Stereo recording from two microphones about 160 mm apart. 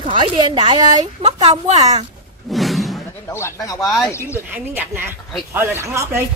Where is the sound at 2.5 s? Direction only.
Centre (ahead or behind).